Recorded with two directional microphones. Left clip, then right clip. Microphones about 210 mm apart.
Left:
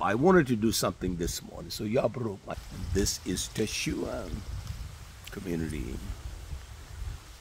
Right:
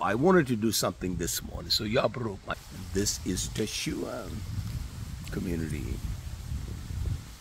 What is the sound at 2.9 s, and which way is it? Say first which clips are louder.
Speech: even; 5° left (ahead or behind).